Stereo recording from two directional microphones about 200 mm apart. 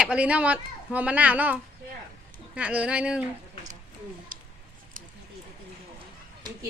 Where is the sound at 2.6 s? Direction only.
5° right (ahead or behind).